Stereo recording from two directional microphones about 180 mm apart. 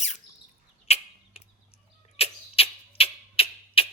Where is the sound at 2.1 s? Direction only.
35° left (ahead or behind).